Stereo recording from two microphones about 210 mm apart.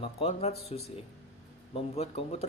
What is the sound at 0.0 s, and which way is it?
Speech, 30° left (ahead or behind).